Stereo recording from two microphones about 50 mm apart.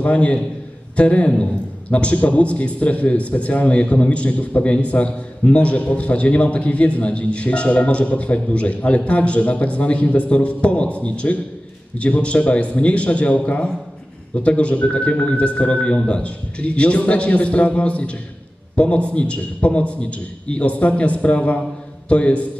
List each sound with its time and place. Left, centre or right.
0.0 s a man's voice: left